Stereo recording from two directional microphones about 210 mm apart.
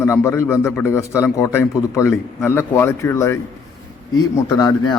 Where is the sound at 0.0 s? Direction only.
15° left (ahead or behind).